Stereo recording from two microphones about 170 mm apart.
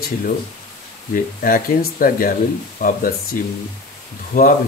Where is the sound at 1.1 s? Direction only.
55° left (ahead or behind).